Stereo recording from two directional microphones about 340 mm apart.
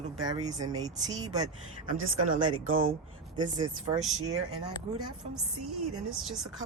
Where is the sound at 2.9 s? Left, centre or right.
Centre.